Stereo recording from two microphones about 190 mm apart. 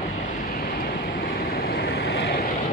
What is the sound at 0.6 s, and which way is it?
Vehicle, 50° left (ahead or behind).